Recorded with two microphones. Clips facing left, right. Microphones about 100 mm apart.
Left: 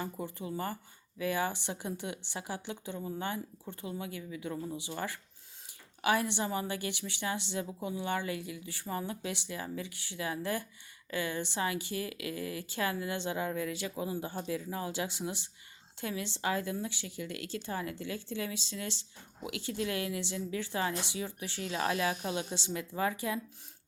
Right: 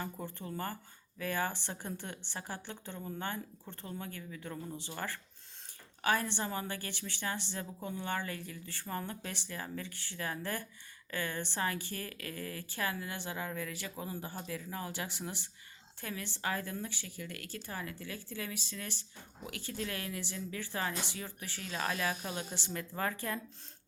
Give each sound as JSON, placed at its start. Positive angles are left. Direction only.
{"t": 0.0, "sound": "a woman's voice", "side_deg": 15}